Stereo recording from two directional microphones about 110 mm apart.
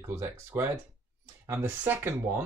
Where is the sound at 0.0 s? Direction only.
20° right (ahead or behind).